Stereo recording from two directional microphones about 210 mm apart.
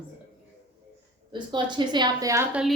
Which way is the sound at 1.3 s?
20° right (ahead or behind).